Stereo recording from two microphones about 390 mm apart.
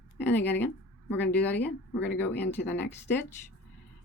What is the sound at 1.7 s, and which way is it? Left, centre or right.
Speech, left.